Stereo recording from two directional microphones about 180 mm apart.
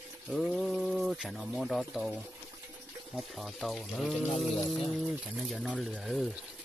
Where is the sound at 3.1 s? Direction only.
Centre (ahead or behind).